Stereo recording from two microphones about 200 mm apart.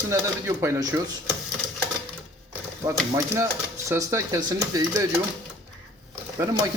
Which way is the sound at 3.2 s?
15° right (ahead or behind).